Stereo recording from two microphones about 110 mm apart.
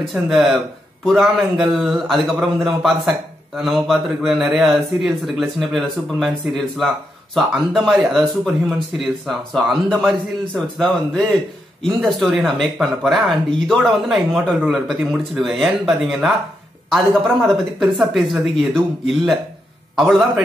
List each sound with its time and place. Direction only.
0.0 s a man's voice: 5° right (ahead or behind)
17.7 s a man's voice: centre (ahead or behind)